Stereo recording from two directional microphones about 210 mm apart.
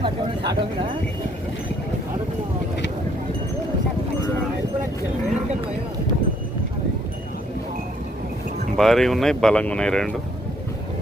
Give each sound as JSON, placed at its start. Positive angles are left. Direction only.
{"t": 0.0, "sound": "speech", "side_deg": -25}
{"t": 8.8, "sound": "speech", "side_deg": 0}